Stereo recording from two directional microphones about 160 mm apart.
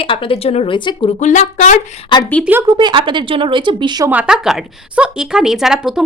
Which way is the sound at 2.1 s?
30° left (ahead or behind).